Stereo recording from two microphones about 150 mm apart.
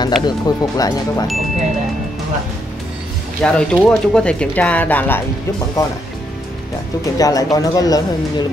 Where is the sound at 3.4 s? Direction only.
5° left (ahead or behind).